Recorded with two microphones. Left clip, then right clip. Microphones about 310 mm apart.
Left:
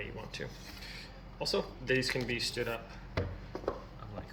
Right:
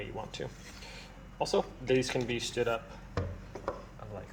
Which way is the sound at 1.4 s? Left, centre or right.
Right.